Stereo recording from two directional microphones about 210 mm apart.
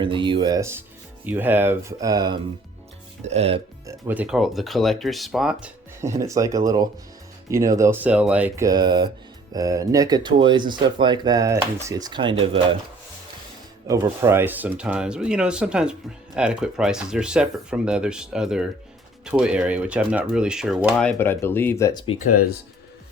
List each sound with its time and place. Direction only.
0.0 s speech: 25° right (ahead or behind)
3.2 s speech: 30° right (ahead or behind)
3.8 s speech: 10° right (ahead or behind)
6.0 s speech: 15° right (ahead or behind)
13.8 s speech: 15° right (ahead or behind); by 22.0 s 15° left (ahead or behind)